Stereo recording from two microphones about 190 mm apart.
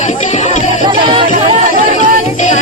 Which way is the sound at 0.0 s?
40° left (ahead or behind).